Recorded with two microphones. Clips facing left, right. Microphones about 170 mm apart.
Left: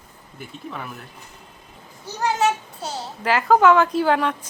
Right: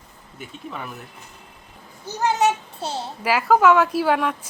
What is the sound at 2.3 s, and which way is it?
Speech, 25° right (ahead or behind).